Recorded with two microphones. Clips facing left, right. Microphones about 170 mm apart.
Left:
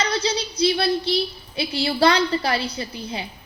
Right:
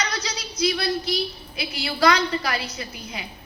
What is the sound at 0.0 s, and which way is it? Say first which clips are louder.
A woman's voice: left 6 dB; 30° left (ahead or behind).